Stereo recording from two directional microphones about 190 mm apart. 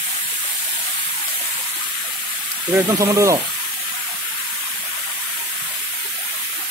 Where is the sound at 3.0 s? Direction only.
15° right (ahead or behind).